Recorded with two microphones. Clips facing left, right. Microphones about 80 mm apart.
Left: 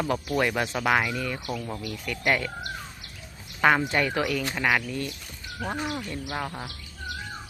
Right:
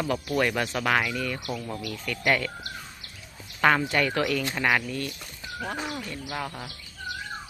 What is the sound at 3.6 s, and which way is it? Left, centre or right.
Speech, centre.